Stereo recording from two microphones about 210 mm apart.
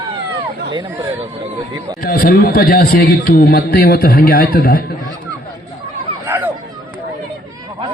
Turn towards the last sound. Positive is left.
turn(degrees=-10)  # may be behind; listen again after turning